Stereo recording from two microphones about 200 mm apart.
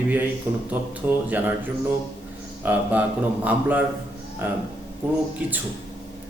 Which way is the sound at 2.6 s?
10° right (ahead or behind).